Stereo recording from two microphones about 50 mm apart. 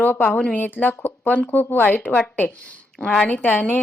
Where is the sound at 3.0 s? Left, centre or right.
Centre.